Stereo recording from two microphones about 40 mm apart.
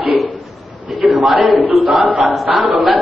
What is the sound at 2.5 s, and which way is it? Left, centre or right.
Speech, right.